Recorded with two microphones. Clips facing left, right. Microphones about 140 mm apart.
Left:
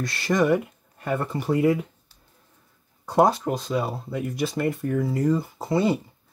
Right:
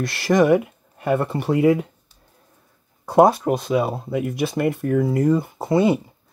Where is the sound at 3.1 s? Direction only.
60° right (ahead or behind).